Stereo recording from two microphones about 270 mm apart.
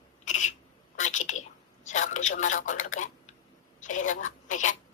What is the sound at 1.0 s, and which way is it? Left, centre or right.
A woman's voice, left.